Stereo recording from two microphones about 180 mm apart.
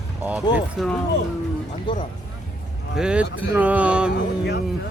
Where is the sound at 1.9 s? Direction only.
25° left (ahead or behind).